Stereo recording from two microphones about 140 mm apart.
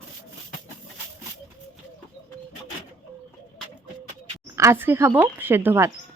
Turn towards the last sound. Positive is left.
turn(degrees=-15)  # may be behind; listen again after turning